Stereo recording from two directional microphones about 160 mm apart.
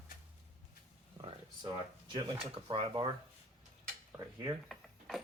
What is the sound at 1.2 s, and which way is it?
Speech, 35° right (ahead or behind).